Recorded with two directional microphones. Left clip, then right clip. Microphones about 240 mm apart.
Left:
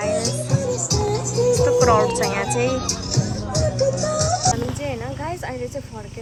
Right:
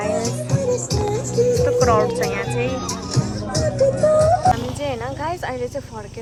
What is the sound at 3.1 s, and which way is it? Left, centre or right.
Music, right.